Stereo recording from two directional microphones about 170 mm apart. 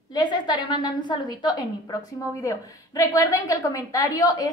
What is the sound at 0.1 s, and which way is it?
A woman's voice, 25° left (ahead or behind).